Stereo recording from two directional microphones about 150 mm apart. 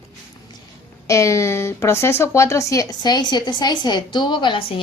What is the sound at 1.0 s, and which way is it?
A woman's voice, 20° left (ahead or behind).